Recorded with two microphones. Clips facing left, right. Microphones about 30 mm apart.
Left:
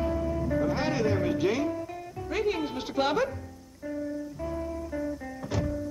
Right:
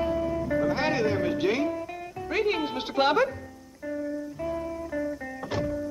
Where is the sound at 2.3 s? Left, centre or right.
Right.